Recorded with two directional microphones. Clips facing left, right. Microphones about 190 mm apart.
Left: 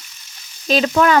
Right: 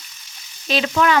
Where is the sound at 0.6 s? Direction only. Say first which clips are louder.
Left 3 dB; 40° left (ahead or behind).